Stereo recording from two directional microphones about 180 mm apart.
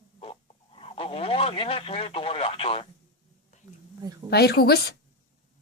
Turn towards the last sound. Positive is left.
turn(degrees=60)  # may be behind; listen again after turning